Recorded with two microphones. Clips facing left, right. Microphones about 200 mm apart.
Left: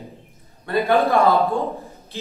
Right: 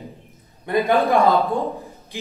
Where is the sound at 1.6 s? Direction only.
15° right (ahead or behind).